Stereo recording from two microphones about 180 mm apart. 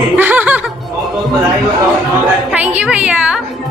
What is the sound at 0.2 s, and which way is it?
Music, 10° right (ahead or behind).